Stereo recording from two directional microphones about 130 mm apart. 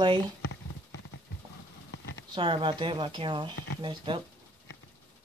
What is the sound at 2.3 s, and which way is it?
Speech, 40° right (ahead or behind).